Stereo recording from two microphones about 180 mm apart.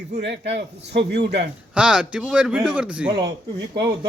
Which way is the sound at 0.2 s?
75° right (ahead or behind).